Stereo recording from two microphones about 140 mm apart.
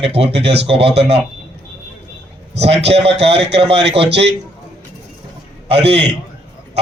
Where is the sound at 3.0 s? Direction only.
45° right (ahead or behind).